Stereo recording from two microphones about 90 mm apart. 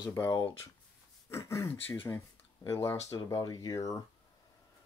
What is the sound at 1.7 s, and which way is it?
Speech, 25° left (ahead or behind).